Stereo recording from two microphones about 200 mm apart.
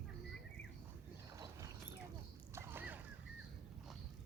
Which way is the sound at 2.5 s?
10° right (ahead or behind).